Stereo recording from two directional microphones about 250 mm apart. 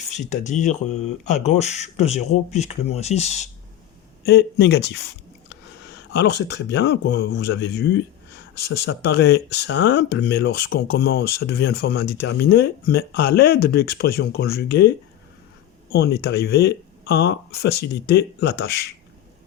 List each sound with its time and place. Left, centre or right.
0.1 s speech: left
4.3 s speech: left
6.1 s speech: left